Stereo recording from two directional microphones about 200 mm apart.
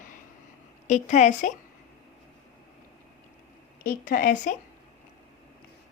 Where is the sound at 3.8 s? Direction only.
45° left (ahead or behind).